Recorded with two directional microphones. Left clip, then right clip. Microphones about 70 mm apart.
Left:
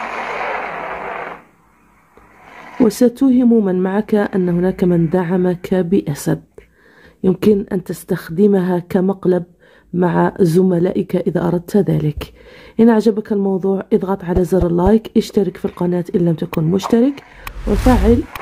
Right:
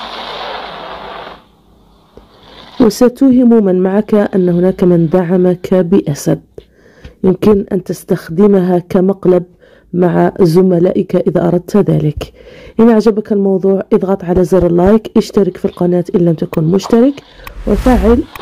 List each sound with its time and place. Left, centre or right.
0.0 s artillery fire: centre
0.8 s radio: centre
2.5 s a sound: centre
2.9 s speech: right
7.2 s speech: right
17.5 s speech: centre